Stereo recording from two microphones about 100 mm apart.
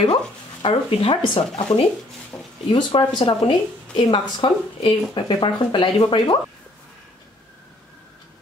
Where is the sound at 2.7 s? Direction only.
55° left (ahead or behind).